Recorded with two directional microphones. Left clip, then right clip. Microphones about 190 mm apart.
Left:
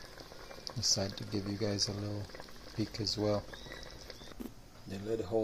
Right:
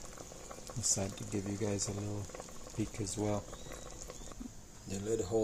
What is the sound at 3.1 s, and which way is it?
Cutlery, 10° left (ahead or behind).